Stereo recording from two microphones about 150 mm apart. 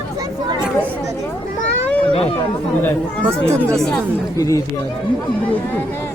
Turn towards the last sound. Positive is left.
turn(degrees=20)  # may be behind; listen again after turning